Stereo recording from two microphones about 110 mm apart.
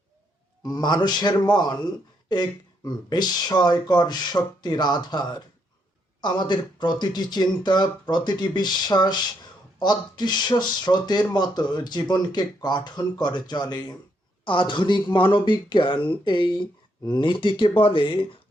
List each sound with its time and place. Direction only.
0.6 s speech: 40° left (ahead or behind)